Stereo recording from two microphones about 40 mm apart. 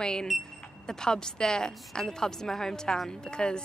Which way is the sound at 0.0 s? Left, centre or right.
Centre.